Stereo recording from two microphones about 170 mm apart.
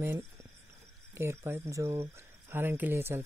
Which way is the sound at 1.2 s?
15° right (ahead or behind).